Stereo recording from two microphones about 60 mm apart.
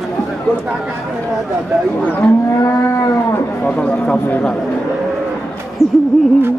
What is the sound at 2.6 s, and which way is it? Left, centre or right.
Moo, left.